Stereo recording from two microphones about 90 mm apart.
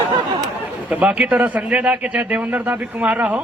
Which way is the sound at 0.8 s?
15° right (ahead or behind).